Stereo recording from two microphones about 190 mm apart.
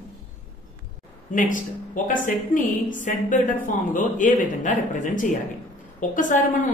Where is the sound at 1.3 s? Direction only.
45° left (ahead or behind).